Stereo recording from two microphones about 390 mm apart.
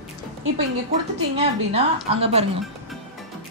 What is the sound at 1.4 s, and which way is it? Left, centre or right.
A woman's voice, centre.